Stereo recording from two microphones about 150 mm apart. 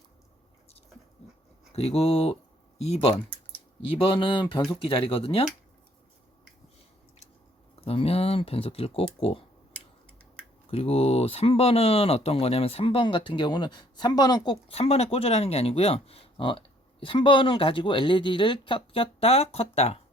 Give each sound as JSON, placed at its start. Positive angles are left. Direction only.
{"t": 1.7, "sound": "speech", "side_deg": 45}
{"t": 7.9, "sound": "speech", "side_deg": 40}
{"t": 10.7, "sound": "speech", "side_deg": 40}